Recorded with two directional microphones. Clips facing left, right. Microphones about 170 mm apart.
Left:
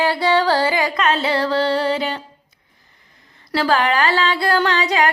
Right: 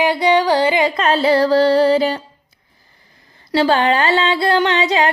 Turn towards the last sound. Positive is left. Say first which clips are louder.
# right 2 dB
turn(degrees=-25)  # may be behind; listen again after turning